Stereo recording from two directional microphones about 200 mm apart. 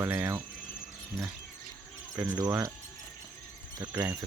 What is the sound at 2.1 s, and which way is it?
Speech, 5° right (ahead or behind).